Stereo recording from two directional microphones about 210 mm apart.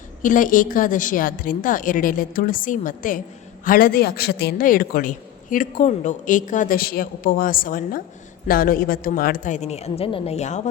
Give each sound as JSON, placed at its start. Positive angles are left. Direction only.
{"t": 0.2, "sound": "a man's voice", "side_deg": 40}